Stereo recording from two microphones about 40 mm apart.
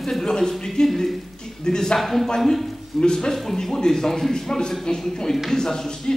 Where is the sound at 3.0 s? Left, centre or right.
Centre.